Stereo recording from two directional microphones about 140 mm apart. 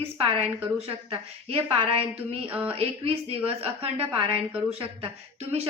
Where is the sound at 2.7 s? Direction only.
45° right (ahead or behind).